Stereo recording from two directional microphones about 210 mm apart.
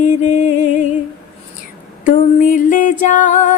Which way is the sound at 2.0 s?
40° left (ahead or behind).